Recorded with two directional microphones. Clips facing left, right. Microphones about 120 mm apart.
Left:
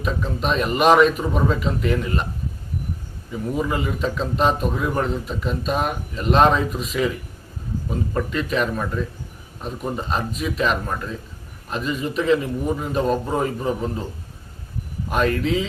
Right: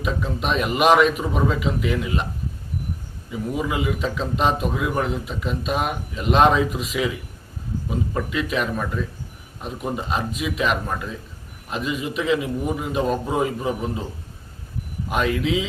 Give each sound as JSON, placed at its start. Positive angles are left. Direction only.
{"t": 0.0, "sound": "a man's voice", "side_deg": -5}
{"t": 3.3, "sound": "a man's voice", "side_deg": -5}
{"t": 15.1, "sound": "a man's voice", "side_deg": -5}